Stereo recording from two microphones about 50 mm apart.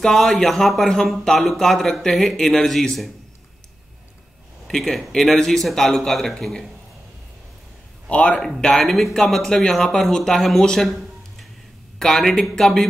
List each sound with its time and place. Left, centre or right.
0.0 s speech: centre
4.6 s speech: centre
8.1 s speech: left
8.7 s speech: centre
10.9 s a sound: centre
12.0 s speech: centre